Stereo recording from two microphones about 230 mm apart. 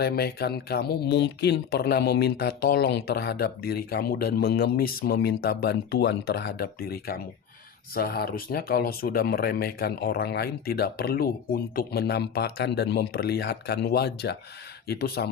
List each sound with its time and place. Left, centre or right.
0.0 s speech: left